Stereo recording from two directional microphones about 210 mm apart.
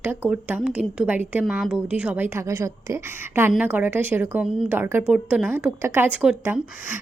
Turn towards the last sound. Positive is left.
turn(degrees=-10)  # may be behind; listen again after turning